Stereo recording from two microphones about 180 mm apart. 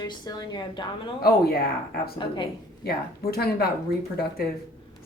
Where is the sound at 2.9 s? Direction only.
60° left (ahead or behind).